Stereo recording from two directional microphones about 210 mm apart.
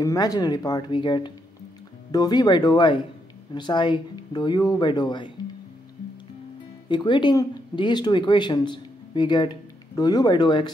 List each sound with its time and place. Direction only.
0.0 s speech: 15° left (ahead or behind)
6.9 s speech: 20° left (ahead or behind)